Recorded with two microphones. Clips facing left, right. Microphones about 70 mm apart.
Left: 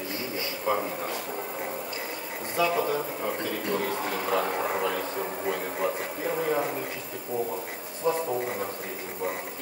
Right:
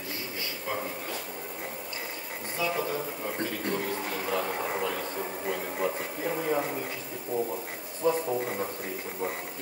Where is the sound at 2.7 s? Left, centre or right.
Left.